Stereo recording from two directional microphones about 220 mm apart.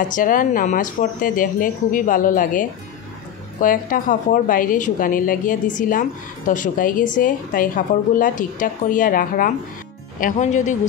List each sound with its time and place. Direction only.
0.1 s a woman's voice: 35° left (ahead or behind)
3.6 s a woman's voice: 40° left (ahead or behind)